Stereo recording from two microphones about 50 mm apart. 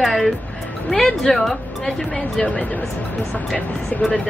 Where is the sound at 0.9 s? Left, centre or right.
Centre.